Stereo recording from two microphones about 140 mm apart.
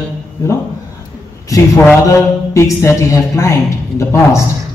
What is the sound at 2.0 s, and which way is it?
Speech, 20° left (ahead or behind).